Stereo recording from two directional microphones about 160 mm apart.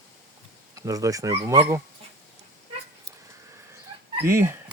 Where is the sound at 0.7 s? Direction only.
20° right (ahead or behind).